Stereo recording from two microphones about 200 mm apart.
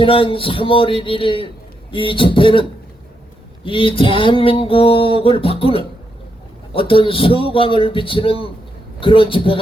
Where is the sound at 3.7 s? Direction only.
25° left (ahead or behind).